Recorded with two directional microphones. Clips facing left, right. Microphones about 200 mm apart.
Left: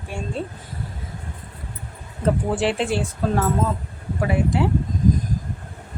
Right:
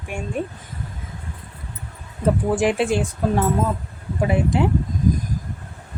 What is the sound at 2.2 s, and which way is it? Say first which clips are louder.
Speech: right 2 dB; 10° right (ahead or behind).